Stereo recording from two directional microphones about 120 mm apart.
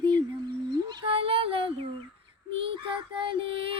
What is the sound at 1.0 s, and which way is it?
Child singing, 50° right (ahead or behind).